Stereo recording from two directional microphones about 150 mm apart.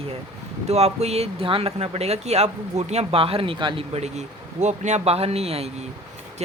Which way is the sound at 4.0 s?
45° right (ahead or behind).